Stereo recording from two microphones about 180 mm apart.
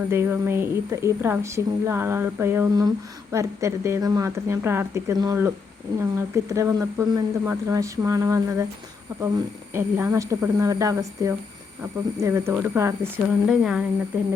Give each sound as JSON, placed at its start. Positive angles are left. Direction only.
{"t": 0.1, "sound": "a woman's voice", "side_deg": -15}
{"t": 9.7, "sound": "a woman's voice", "side_deg": -15}